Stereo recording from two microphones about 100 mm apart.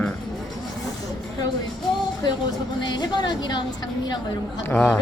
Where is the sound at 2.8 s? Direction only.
45° left (ahead or behind).